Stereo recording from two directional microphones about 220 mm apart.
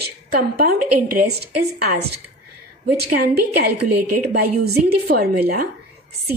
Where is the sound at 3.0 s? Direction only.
45° right (ahead or behind).